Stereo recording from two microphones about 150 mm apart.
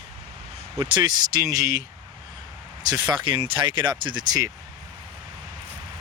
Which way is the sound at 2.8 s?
30° right (ahead or behind).